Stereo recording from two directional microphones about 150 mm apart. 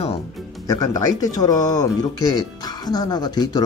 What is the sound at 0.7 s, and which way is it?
Speech, 25° left (ahead or behind).